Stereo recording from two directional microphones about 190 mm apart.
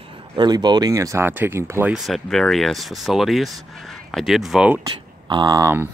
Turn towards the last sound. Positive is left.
turn(degrees=-15)  # may be behind; listen again after turning